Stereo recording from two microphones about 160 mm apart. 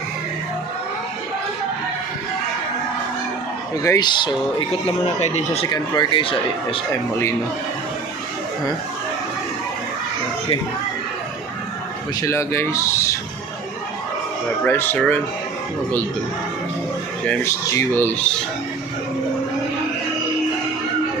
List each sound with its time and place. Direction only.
3.8 s speech: 25° left (ahead or behind)
4.7 s speech: 40° left (ahead or behind)
5.7 s speech: 25° left (ahead or behind)
12.2 s speech: 15° left (ahead or behind)
14.6 s speech: 10° left (ahead or behind)
17.4 s speech: 15° left (ahead or behind)